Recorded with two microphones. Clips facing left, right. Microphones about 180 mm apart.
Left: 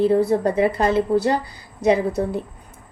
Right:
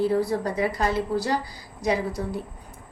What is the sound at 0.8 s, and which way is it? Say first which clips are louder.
Speech: left 7 dB; 20° left (ahead or behind).